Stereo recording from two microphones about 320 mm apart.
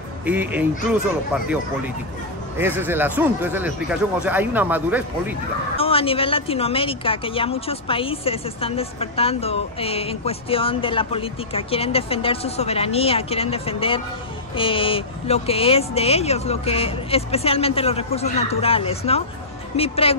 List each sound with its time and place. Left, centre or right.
0.2 s speech: centre
2.6 s speech: centre
5.8 s a woman's voice: centre